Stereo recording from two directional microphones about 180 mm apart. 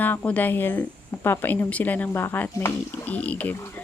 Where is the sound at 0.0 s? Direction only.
10° left (ahead or behind).